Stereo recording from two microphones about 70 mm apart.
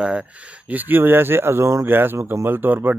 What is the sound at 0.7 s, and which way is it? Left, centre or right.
Speech, right.